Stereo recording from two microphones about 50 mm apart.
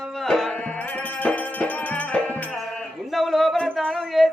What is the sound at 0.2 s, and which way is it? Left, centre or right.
Music, centre.